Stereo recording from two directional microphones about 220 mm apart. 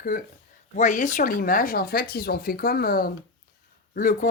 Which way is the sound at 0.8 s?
35° left (ahead or behind).